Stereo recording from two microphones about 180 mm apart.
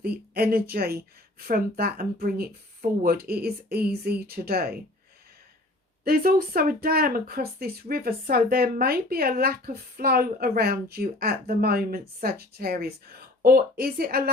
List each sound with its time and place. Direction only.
0.0 s speech: 60° right (ahead or behind)
6.1 s speech: 55° right (ahead or behind)